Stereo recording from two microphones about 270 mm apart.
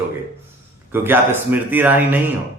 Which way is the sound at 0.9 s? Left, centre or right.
Centre.